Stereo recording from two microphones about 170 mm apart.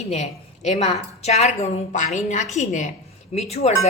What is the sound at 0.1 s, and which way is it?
A woman's voice, 40° left (ahead or behind).